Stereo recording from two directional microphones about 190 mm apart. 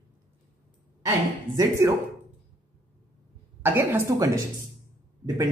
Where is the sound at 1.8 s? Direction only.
15° right (ahead or behind).